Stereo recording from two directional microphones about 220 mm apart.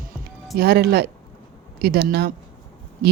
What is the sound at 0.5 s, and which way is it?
Speech, 45° right (ahead or behind).